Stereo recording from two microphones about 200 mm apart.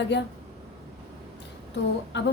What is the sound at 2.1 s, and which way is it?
Speech, 60° left (ahead or behind).